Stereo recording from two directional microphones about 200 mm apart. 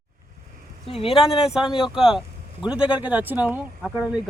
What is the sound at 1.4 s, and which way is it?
A man's voice, 5° right (ahead or behind).